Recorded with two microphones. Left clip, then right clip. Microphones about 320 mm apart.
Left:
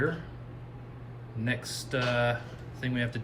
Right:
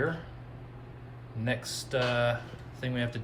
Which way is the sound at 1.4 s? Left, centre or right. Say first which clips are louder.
Even; centre.